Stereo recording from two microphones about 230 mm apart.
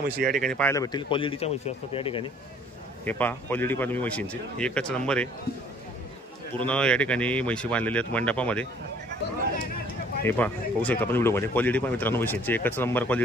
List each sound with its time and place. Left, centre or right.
0.4 s speech: centre; by 2.2 s left
3.1 s speech: centre
6.6 s speech: centre
10.2 s speech: centre